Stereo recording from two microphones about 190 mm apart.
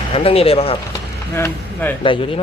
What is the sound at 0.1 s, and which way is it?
Speech, 30° left (ahead or behind).